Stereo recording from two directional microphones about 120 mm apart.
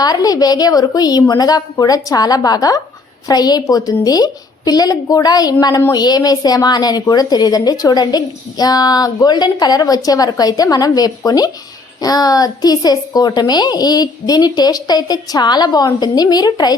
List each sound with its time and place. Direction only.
0.0 s a woman's voice: 30° left (ahead or behind)